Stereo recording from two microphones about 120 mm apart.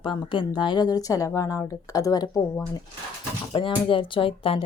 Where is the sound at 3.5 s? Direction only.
45° left (ahead or behind).